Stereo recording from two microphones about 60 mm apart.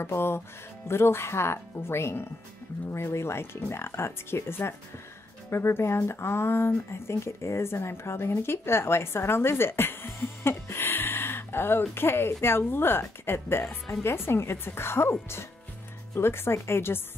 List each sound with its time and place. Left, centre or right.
0.0 s speech: left